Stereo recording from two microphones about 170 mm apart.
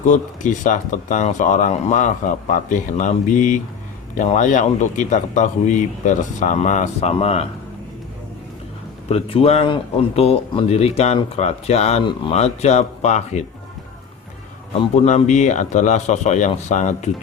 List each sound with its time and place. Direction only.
0.0 s speech: 45° left (ahead or behind)
9.0 s speech: 35° left (ahead or behind)
15.0 s speech: 45° left (ahead or behind)